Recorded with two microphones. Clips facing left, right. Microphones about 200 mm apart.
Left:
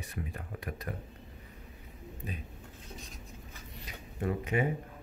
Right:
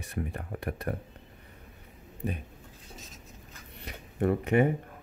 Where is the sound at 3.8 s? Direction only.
60° right (ahead or behind).